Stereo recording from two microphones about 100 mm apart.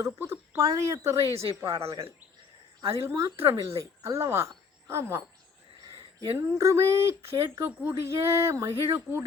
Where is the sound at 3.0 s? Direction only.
30° right (ahead or behind).